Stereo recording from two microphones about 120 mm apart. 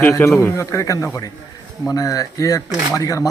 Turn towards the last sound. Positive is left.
turn(degrees=30)  # may be behind; listen again after turning